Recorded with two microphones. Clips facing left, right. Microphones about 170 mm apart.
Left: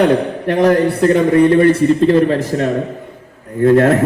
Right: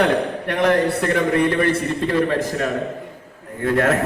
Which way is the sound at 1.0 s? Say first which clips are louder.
Left 8 dB; 30° left (ahead or behind).